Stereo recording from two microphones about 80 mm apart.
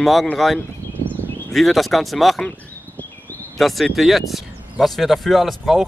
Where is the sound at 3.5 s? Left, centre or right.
Centre.